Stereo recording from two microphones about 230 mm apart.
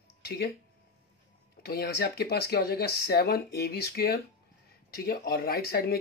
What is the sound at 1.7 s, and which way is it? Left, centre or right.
Speech, left.